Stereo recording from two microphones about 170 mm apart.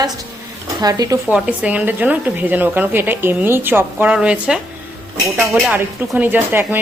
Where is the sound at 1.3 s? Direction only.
5° right (ahead or behind).